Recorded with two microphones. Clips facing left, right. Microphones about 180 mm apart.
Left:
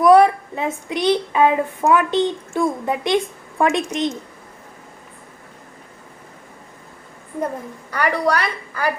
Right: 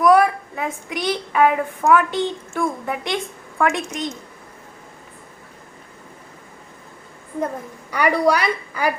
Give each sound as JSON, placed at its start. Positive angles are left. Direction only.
{"t": 0.0, "sound": "speech", "side_deg": 25}
{"t": 7.9, "sound": "a woman's voice", "side_deg": -15}